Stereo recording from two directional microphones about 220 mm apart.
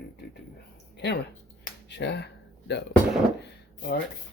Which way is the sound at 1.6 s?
50° left (ahead or behind).